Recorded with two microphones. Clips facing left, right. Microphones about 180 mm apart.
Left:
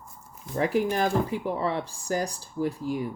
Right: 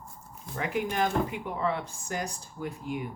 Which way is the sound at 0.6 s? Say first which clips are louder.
Left 5 dB; 35° left (ahead or behind).